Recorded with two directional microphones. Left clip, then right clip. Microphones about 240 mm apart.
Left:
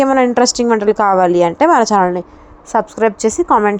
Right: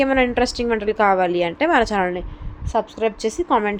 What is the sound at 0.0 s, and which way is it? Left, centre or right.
A woman's voice, left.